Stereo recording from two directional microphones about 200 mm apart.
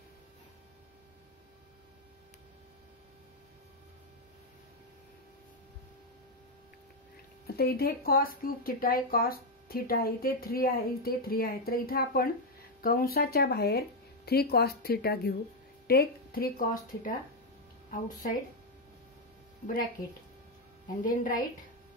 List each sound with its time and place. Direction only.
7.4 s speech: 50° left (ahead or behind)
19.6 s speech: 40° left (ahead or behind)
21.0 s speech: 40° left (ahead or behind)